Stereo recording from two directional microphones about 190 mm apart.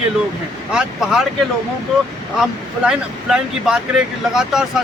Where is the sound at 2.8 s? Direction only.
5° right (ahead or behind).